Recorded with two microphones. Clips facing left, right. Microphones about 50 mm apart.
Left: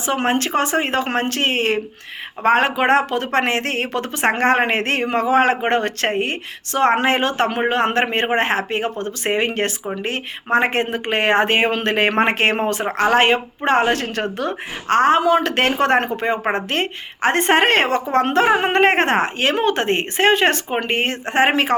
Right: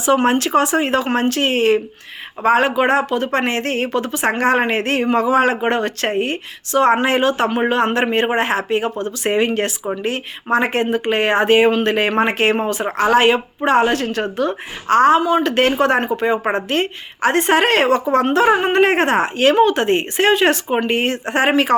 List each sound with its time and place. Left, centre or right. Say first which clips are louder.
0.0 s speech: right 4 dB; left
15.2 s speech: even; left
15.5 s speech: right 1 dB; left